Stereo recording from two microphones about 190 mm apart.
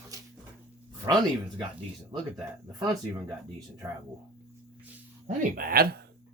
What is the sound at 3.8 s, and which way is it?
Speech, 15° right (ahead or behind).